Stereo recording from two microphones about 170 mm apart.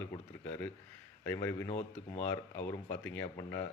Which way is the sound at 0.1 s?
10° left (ahead or behind).